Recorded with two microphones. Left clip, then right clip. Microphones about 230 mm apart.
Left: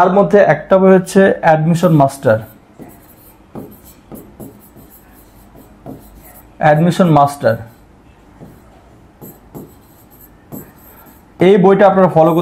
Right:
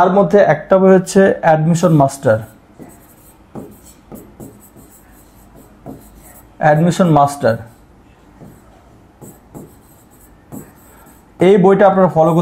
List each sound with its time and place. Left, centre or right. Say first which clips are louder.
0.0 s speech: left 1 dB; left
6.6 s speech: left 1 dB; left
9.2 s a sound: left 2 dB; left
11.3 s speech: left 1 dB; left